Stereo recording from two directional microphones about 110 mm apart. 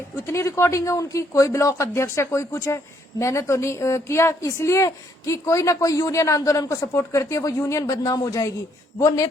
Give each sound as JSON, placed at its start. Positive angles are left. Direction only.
{"t": 0.3, "sound": "speech", "side_deg": 25}